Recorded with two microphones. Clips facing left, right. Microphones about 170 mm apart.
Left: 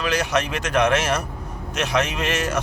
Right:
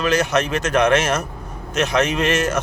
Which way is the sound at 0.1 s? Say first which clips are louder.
Right 3 dB; 10° left (ahead or behind).